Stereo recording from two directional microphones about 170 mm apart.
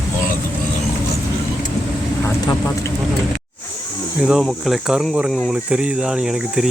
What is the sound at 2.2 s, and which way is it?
Vehicle, 15° left (ahead or behind).